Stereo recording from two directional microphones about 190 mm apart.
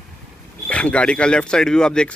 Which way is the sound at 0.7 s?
5° left (ahead or behind).